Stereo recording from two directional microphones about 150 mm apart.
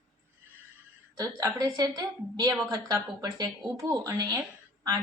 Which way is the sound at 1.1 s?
25° right (ahead or behind).